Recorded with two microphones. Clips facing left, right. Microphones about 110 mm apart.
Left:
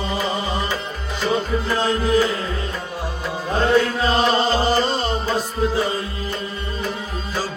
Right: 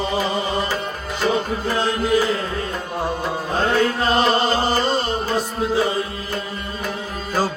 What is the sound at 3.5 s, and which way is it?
Music, 45° right (ahead or behind).